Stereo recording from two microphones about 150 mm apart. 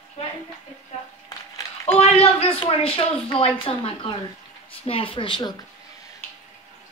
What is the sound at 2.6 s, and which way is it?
Speech, 35° left (ahead or behind).